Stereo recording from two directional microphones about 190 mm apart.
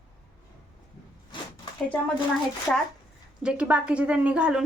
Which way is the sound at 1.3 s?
25° left (ahead or behind).